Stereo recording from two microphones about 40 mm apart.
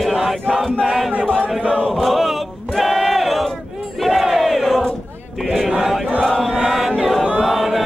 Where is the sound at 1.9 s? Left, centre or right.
Centre.